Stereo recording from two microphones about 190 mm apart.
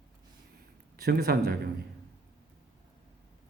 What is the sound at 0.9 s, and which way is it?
Speech, 55° right (ahead or behind).